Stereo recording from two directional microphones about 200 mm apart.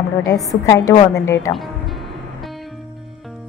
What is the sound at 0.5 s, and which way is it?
Speech, 15° left (ahead or behind).